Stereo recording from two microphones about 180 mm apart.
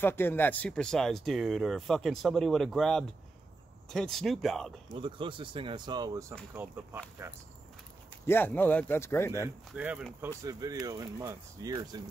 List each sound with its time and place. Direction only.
0.0 s speech: 10° left (ahead or behind)
4.9 s speech: 30° right (ahead or behind)
8.3 s speech: 10° left (ahead or behind)
9.7 s speech: 5° right (ahead or behind)
10.4 s speech: 20° right (ahead or behind)